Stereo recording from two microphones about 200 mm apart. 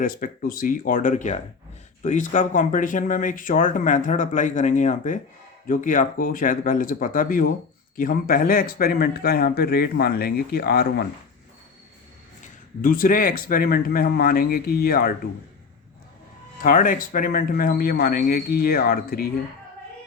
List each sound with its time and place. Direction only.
0.0 s speech: 45° left (ahead or behind)
12.8 s speech: 45° left (ahead or behind)
16.6 s speech: 40° left (ahead or behind)